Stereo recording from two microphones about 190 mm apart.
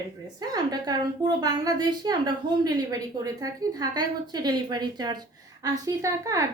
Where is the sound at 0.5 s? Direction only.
20° right (ahead or behind).